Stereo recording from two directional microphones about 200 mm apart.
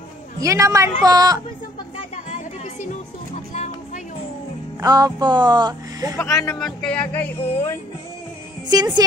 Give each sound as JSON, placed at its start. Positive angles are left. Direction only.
{"t": 0.4, "sound": "a woman's voice", "side_deg": -15}
{"t": 2.2, "sound": "music", "side_deg": 40}
{"t": 3.5, "sound": "a sound", "side_deg": 35}
{"t": 4.7, "sound": "speech", "side_deg": -20}
{"t": 6.1, "sound": "speech", "side_deg": 15}
{"t": 6.6, "sound": "speech", "side_deg": 5}
{"t": 8.6, "sound": "a woman's voice", "side_deg": -20}